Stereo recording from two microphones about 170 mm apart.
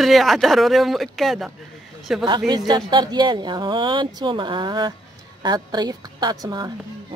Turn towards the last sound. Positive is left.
turn(degrees=-20)  # may be behind; listen again after turning